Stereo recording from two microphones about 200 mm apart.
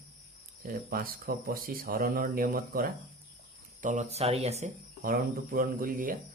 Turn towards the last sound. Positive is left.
turn(degrees=-45)  # may be behind; listen again after turning